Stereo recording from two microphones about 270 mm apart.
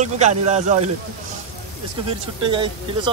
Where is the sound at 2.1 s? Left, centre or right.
Centre.